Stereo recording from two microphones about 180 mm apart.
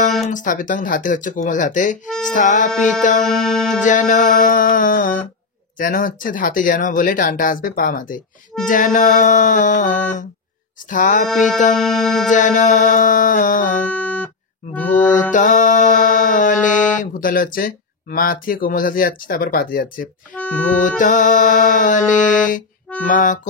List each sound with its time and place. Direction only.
0.3 s speech: 45° left (ahead or behind)
3.2 s music: centre (ahead or behind)
3.8 s speech: 45° left (ahead or behind)
11.7 s music: centre (ahead or behind)
12.3 s speech: 45° left (ahead or behind)
13.9 s music: 5° left (ahead or behind)
15.3 s music: 45° left (ahead or behind)
16.9 s speech: 50° left (ahead or behind)
20.3 s music: 5° left (ahead or behind)
20.8 s speech: 45° left (ahead or behind)